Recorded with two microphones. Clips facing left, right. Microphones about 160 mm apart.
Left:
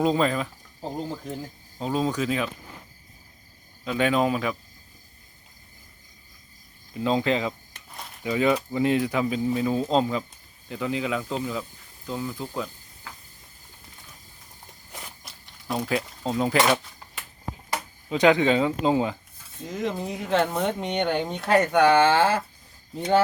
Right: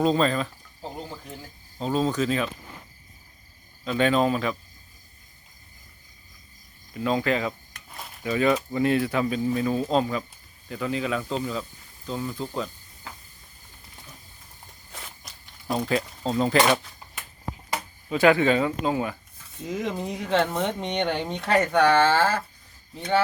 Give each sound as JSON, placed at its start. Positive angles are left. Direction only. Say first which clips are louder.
{"t": 0.0, "sound": "speech", "louder": "right 1 dB", "side_deg": 15}
{"t": 1.8, "sound": "speech", "louder": "right 1 dB", "side_deg": 10}
{"t": 3.8, "sound": "speech", "louder": "right 1 dB", "side_deg": 10}
{"t": 6.9, "sound": "speech", "louder": "left 1 dB", "side_deg": 20}
{"t": 15.2, "sound": "a sound", "louder": "even", "side_deg": 5}
{"t": 15.7, "sound": "speech", "louder": "right 1 dB", "side_deg": 0}
{"t": 18.1, "sound": "speech", "louder": "even", "side_deg": 20}
{"t": 19.6, "sound": "speech", "louder": "even", "side_deg": 0}